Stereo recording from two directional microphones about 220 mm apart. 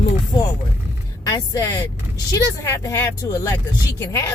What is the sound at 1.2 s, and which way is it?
Speech, 15° left (ahead or behind).